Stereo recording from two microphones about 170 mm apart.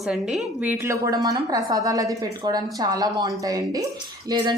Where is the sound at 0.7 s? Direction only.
15° right (ahead or behind).